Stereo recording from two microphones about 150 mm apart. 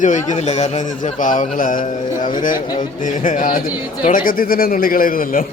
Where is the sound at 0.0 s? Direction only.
55° left (ahead or behind).